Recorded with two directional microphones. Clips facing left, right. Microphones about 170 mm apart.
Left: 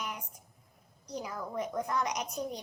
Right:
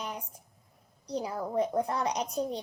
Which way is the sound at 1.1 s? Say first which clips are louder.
Right 5 dB; 30° right (ahead or behind).